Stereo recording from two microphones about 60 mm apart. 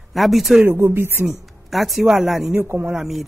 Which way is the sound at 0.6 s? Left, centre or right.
Right.